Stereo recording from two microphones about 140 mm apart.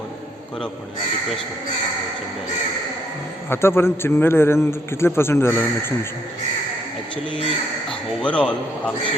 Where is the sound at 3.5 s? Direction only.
15° left (ahead or behind).